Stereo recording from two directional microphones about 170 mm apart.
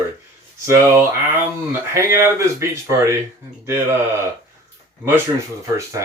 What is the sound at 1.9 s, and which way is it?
Speech, 15° right (ahead or behind).